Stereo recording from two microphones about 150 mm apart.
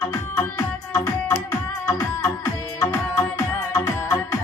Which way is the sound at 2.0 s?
20° left (ahead or behind).